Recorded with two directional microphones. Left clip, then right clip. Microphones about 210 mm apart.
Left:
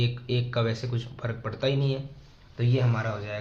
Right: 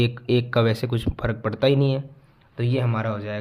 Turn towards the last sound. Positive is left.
turn(degrees=-55)  # may be behind; listen again after turning